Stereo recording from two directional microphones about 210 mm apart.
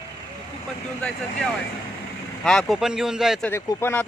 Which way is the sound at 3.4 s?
15° left (ahead or behind).